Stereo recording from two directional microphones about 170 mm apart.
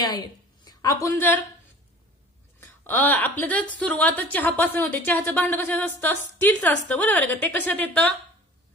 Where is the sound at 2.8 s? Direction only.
10° left (ahead or behind).